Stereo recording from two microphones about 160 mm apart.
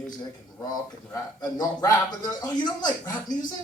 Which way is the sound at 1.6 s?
25° left (ahead or behind).